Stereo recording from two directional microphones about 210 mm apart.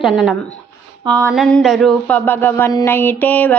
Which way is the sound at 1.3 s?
Centre (ahead or behind).